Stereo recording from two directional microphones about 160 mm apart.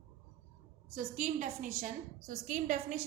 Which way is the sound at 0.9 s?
50° right (ahead or behind).